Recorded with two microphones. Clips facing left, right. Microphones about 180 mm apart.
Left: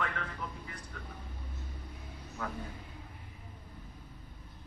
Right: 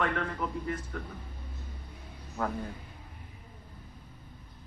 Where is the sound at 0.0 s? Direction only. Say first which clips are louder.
Right 7 dB; 60° right (ahead or behind).